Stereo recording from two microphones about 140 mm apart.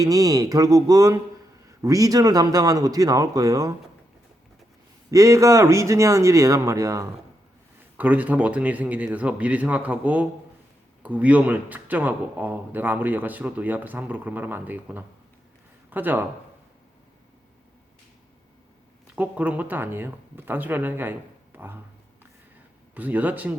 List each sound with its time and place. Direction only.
0.0 s speech: 25° right (ahead or behind)
5.1 s speech: 25° right (ahead or behind)
7.9 s a man's voice: 10° right (ahead or behind)
19.1 s a man's voice: 10° right (ahead or behind)
23.0 s a man's voice: 10° right (ahead or behind)